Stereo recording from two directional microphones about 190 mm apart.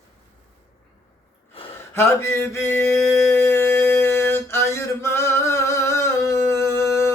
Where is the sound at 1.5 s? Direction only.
30° left (ahead or behind).